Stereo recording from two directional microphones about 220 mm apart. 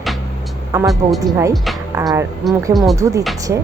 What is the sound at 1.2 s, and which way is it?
Speech, 15° right (ahead or behind).